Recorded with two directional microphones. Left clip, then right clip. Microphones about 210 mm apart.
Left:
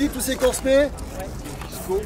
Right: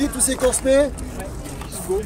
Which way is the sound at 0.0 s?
30° right (ahead or behind).